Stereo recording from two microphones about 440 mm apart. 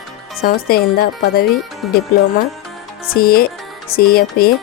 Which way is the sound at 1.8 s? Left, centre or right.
Centre.